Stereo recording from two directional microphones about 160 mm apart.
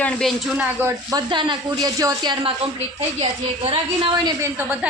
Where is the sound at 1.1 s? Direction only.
25° right (ahead or behind).